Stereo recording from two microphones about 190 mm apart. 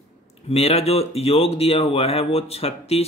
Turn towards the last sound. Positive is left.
turn(degrees=30)  # may be behind; listen again after turning